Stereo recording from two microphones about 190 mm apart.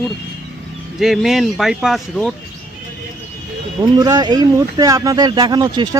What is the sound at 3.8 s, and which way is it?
Speech, 20° right (ahead or behind).